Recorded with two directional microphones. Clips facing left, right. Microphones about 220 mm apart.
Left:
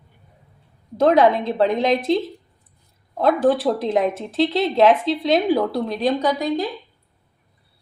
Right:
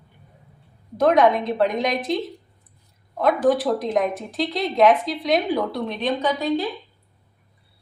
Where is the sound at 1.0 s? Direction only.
30° left (ahead or behind).